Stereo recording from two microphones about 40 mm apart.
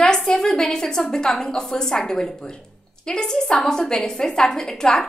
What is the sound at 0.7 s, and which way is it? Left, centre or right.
A woman's voice, centre.